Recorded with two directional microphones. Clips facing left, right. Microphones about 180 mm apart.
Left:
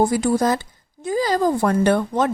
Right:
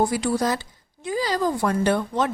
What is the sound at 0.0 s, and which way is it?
Speech, 45° left (ahead or behind).